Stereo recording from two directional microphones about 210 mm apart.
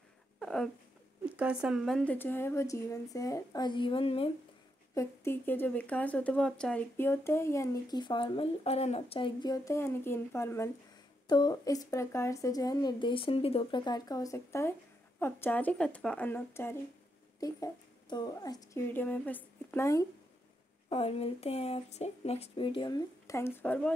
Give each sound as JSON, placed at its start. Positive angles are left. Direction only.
{"t": 0.4, "sound": "speech", "side_deg": 5}
{"t": 4.9, "sound": "speech", "side_deg": 10}
{"t": 18.1, "sound": "speech", "side_deg": 20}
{"t": 20.9, "sound": "speech", "side_deg": 30}